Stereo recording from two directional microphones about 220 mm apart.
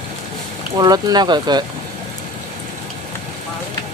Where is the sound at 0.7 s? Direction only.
20° right (ahead or behind).